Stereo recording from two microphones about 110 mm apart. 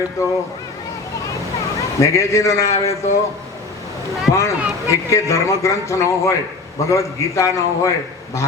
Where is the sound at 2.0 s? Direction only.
30° left (ahead or behind).